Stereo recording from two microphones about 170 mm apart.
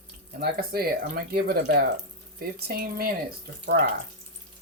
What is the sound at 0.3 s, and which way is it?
Speech, 65° right (ahead or behind).